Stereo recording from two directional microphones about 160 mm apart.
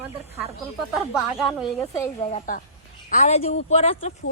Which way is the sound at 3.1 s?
50° left (ahead or behind).